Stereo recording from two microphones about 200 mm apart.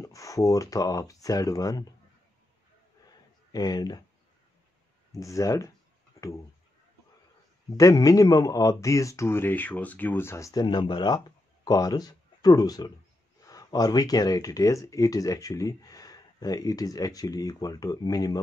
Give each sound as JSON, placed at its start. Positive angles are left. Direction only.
{"t": 0.0, "sound": "speech", "side_deg": 15}
{"t": 3.5, "sound": "speech", "side_deg": 20}
{"t": 5.1, "sound": "speech", "side_deg": 15}
{"t": 6.2, "sound": "a sound", "side_deg": 15}
{"t": 7.7, "sound": "speech", "side_deg": 15}